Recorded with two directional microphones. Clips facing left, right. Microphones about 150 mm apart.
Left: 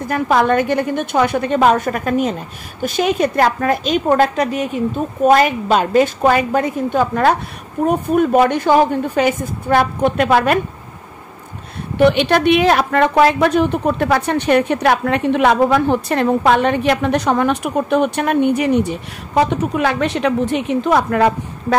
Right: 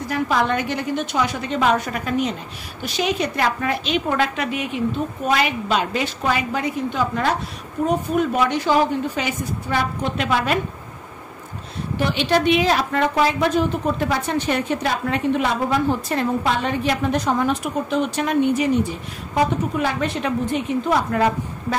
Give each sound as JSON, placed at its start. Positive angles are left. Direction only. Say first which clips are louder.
{"t": 0.0, "sound": "a woman's voice", "louder": "left 5 dB", "side_deg": 50}
{"t": 12.0, "sound": "a woman's voice", "louder": "left 7 dB", "side_deg": 60}